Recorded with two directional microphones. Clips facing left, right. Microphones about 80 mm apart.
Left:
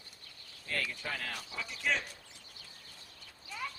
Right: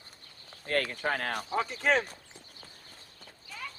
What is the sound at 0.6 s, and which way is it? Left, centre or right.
Speech, right.